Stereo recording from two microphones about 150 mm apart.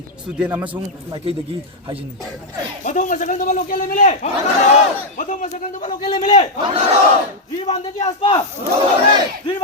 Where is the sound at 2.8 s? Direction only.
60° left (ahead or behind).